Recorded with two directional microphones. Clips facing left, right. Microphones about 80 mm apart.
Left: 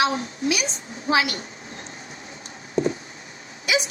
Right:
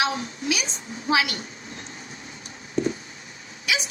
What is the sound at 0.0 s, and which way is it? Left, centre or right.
A woman's voice, left.